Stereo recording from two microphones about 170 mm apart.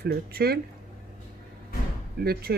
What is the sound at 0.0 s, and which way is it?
Speech, 65° right (ahead or behind).